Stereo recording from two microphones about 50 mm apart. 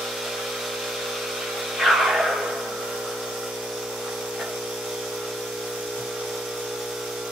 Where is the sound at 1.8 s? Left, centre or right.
Centre.